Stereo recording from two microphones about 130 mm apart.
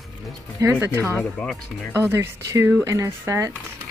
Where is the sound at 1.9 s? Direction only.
20° right (ahead or behind).